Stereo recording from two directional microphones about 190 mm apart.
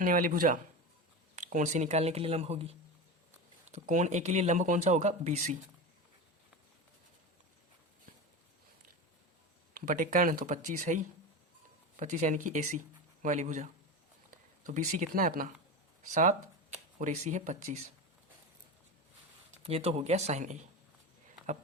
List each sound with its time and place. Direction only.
0.0 s speech: 45° right (ahead or behind)
9.7 s speech: 45° right (ahead or behind)
17.0 s speech: 40° right (ahead or behind)
19.6 s speech: 30° right (ahead or behind)